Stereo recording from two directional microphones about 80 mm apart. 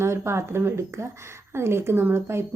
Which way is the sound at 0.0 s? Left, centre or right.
Right.